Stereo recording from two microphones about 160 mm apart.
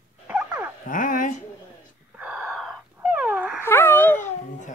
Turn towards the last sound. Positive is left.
turn(degrees=50)  # may be behind; listen again after turning